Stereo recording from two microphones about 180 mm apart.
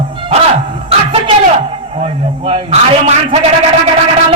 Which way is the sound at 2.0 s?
35° right (ahead or behind).